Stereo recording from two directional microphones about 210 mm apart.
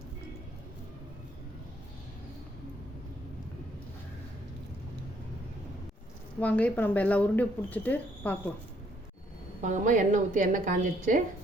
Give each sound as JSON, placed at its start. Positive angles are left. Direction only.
{"t": 6.4, "sound": "speech", "side_deg": 5}
{"t": 9.6, "sound": "a woman's voice", "side_deg": -35}